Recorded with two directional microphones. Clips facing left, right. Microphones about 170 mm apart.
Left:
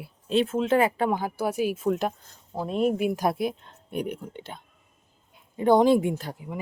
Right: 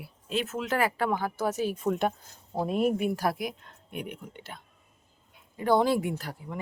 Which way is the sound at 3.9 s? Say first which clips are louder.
Left 7 dB; 40° left (ahead or behind).